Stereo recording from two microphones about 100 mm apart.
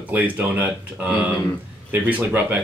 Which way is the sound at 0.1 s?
15° right (ahead or behind).